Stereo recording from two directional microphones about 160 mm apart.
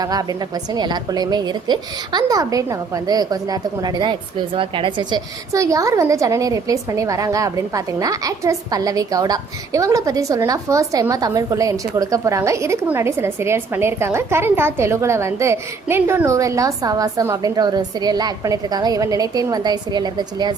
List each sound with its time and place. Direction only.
0.0 s a woman's voice: 25° right (ahead or behind)